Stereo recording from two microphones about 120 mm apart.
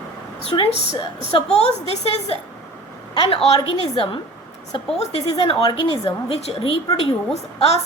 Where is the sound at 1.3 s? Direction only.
60° left (ahead or behind).